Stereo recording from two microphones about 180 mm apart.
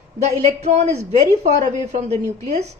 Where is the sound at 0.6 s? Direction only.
40° right (ahead or behind).